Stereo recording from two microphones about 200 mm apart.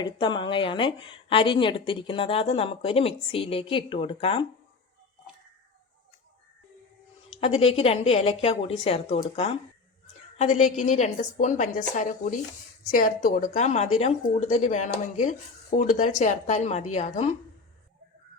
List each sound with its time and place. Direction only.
0.0 s a woman's voice: 25° left (ahead or behind)
7.4 s a woman's voice: 30° left (ahead or behind)